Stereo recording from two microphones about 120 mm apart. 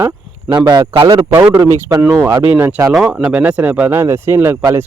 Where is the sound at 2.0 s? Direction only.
20° right (ahead or behind).